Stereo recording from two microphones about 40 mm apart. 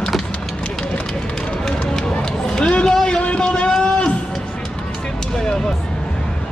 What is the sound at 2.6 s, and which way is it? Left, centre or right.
Speech, left.